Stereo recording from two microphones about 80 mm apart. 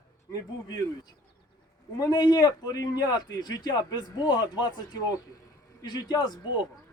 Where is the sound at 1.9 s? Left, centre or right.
Left.